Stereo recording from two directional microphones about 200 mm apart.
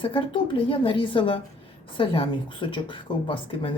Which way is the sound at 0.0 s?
25° left (ahead or behind).